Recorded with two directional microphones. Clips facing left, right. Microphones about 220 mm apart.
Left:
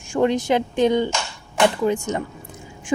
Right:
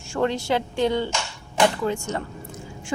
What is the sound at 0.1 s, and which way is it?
A woman's voice, 15° left (ahead or behind).